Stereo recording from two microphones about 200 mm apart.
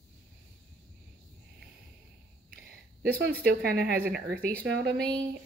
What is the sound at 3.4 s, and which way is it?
Speech, 50° right (ahead or behind).